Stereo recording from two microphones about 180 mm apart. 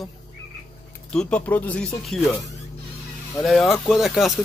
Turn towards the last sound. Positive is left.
turn(degrees=0)  # may be behind; listen again after turning